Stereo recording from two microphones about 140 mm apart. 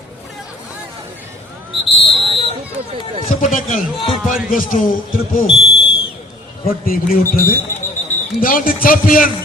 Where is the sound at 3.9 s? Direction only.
40° left (ahead or behind).